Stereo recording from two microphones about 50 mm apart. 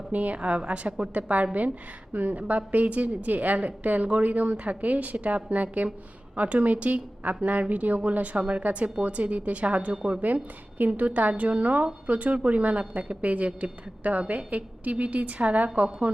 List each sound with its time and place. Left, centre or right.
0.1 s a woman's voice: right